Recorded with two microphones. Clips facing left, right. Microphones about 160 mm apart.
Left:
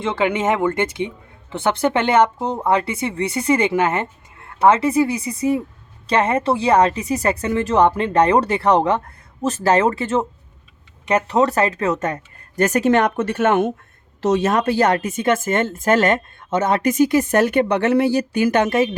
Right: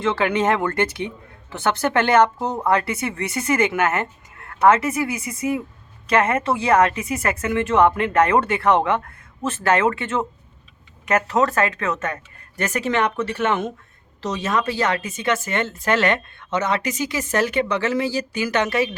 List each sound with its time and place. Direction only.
0.3 s speech: 10° left (ahead or behind)
0.7 s speech: 20° left (ahead or behind); by 10.2 s 40° left (ahead or behind)
11.3 s a woman's voice: 35° left (ahead or behind); by 18.9 s 50° left (ahead or behind)